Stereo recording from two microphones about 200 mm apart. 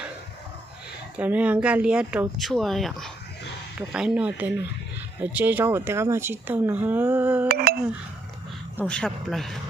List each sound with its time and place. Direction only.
1.1 s speech: 5° right (ahead or behind)
7.4 s speech: 50° right (ahead or behind)
8.8 s speech: 5° left (ahead or behind)